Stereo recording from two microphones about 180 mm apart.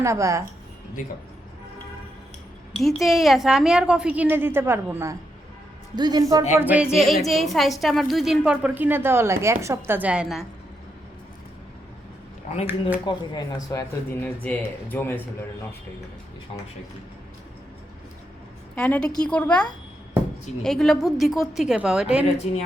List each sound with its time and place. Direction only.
0.0 s a woman's voice: 15° right (ahead or behind)
2.7 s a woman's voice: centre (ahead or behind); by 6.4 s 20° right (ahead or behind)
6.5 s a woman's voice: 10° right (ahead or behind)
13.1 s speech: 20° left (ahead or behind)
18.8 s a woman's voice: 5° left (ahead or behind)